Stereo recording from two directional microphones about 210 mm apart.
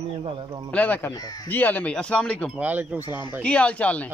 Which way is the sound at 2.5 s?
10° right (ahead or behind).